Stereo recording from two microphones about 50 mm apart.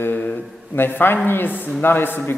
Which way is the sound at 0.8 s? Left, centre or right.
Left.